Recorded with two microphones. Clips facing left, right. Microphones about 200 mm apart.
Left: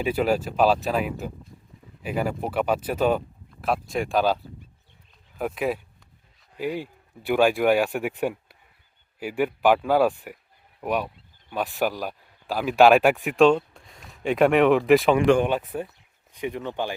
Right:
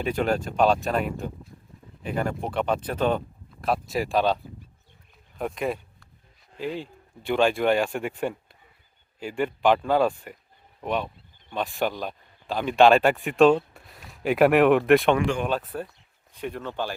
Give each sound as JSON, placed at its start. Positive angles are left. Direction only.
{"t": 0.0, "sound": "speech", "side_deg": 5}
{"t": 5.4, "sound": "speech", "side_deg": 5}
{"t": 13.3, "sound": "speech", "side_deg": -5}
{"t": 15.4, "sound": "speech", "side_deg": 15}